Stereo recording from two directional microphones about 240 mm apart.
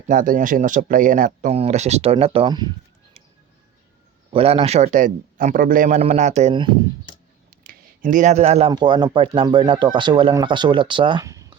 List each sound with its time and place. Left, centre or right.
0.1 s speech: right
4.3 s speech: right
7.5 s a sound: right
8.7 s speech: centre